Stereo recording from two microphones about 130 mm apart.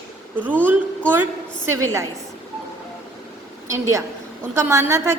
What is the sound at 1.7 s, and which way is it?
Speech, 20° right (ahead or behind).